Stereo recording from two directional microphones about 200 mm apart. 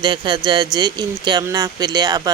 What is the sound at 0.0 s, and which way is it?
Speech, 20° right (ahead or behind).